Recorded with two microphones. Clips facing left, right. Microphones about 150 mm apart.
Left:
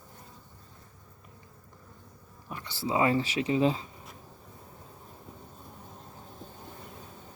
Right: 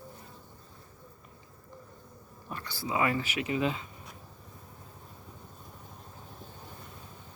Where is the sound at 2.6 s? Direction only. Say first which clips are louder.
Left 3 dB; 25° left (ahead or behind).